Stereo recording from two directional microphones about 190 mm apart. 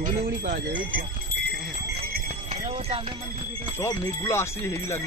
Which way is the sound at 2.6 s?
30° right (ahead or behind).